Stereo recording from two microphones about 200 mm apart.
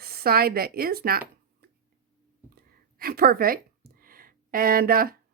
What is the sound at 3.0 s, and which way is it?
Speech, 50° right (ahead or behind).